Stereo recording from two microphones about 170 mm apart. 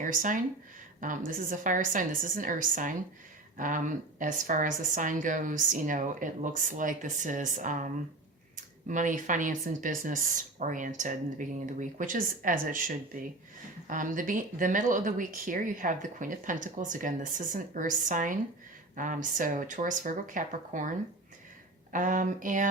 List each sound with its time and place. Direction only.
0.0 s speech: 50° right (ahead or behind)
13.8 s speech: 50° right (ahead or behind)
21.9 s speech: 50° right (ahead or behind)